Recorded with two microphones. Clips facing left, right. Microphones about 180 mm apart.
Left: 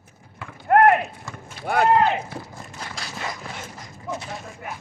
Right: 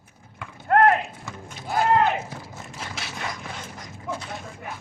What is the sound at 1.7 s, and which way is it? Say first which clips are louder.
Speech: left 3 dB; 65° left (ahead or behind).